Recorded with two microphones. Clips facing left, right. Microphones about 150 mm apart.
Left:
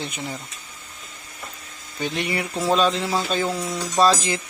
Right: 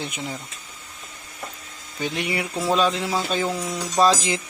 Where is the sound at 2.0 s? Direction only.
10° right (ahead or behind).